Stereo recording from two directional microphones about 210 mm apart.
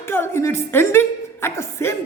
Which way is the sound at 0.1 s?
10° left (ahead or behind).